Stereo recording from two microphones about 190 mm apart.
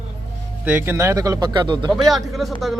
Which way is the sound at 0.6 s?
10° right (ahead or behind).